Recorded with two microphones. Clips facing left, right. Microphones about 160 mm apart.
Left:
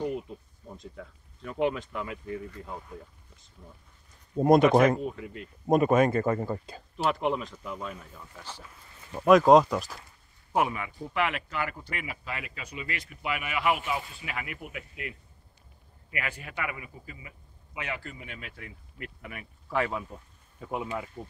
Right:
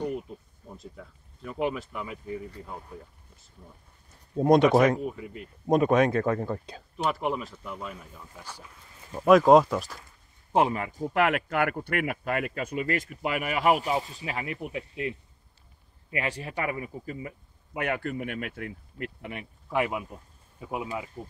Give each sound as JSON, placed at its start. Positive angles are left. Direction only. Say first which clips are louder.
{"t": 0.0, "sound": "speech", "louder": "even", "side_deg": 0}
{"t": 4.4, "sound": "speech", "louder": "even", "side_deg": 5}
{"t": 9.1, "sound": "speech", "louder": "right 1 dB", "side_deg": 0}
{"t": 10.5, "sound": "a man's voice", "louder": "right 4 dB", "side_deg": -35}
{"t": 17.7, "sound": "speech", "louder": "right 8 dB", "side_deg": -55}
{"t": 18.9, "sound": "speech", "louder": "right 5 dB", "side_deg": -30}
{"t": 19.7, "sound": "speech", "louder": "right 2 dB", "side_deg": -15}